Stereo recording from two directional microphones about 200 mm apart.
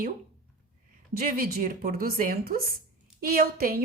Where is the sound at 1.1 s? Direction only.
45° right (ahead or behind).